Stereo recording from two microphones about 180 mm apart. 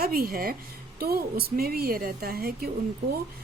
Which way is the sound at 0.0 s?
55° right (ahead or behind).